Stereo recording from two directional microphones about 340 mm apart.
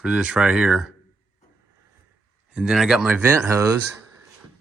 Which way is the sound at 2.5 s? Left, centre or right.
Centre.